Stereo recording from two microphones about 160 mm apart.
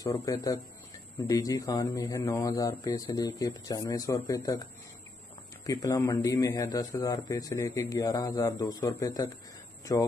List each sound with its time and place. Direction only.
0.0 s a man's voice: 20° left (ahead or behind)
5.7 s a man's voice: 20° left (ahead or behind)